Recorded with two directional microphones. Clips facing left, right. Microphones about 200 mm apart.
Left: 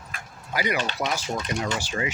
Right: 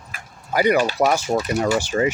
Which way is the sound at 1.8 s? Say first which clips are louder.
Right 9 dB; 45° right (ahead or behind).